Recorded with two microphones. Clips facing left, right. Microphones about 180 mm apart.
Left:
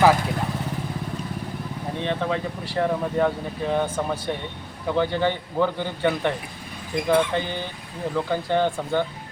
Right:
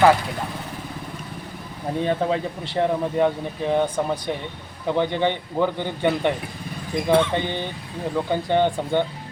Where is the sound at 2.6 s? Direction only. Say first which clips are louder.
Right 1 dB; 20° right (ahead or behind).